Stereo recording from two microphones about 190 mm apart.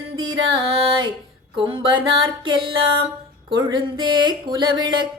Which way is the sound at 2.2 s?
25° right (ahead or behind).